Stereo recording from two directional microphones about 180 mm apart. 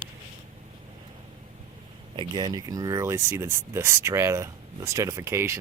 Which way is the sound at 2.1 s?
25° right (ahead or behind).